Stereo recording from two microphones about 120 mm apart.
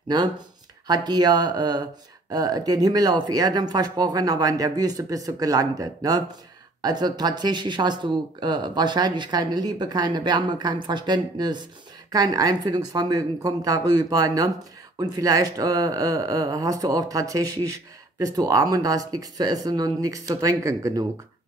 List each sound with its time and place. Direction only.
0.8 s speech: 35° right (ahead or behind)